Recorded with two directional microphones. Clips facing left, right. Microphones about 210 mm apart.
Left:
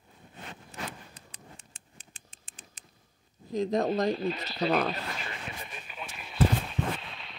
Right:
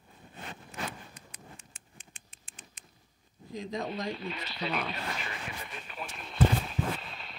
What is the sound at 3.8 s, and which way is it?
Speech, 45° left (ahead or behind).